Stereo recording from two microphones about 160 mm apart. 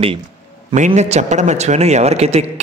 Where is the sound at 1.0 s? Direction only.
45° right (ahead or behind).